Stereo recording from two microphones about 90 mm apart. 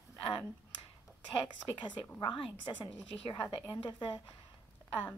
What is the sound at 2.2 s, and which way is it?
A woman's voice, 60° left (ahead or behind).